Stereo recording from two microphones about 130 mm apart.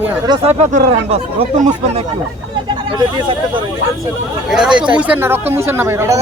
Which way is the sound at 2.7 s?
40° right (ahead or behind).